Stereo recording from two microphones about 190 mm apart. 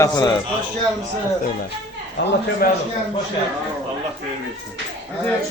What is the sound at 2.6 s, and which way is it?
Speech, 50° left (ahead or behind).